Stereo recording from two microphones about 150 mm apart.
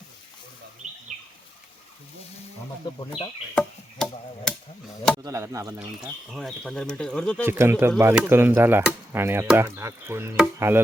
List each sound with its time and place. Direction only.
0.8 s bird: 55° right (ahead or behind)
3.5 s chop: 5° left (ahead or behind)
5.2 s speech: 20° right (ahead or behind)
6.0 s speech: centre (ahead or behind)
7.4 s speech: 15° right (ahead or behind)